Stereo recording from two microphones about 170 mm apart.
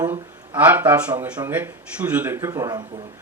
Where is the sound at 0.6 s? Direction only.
10° right (ahead or behind).